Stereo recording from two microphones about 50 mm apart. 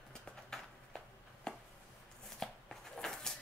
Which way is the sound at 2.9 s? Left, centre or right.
Centre.